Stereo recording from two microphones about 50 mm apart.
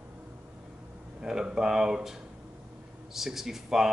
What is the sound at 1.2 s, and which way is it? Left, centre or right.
Speech, centre.